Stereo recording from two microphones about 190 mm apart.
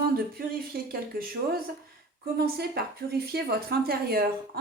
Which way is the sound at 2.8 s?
55° right (ahead or behind).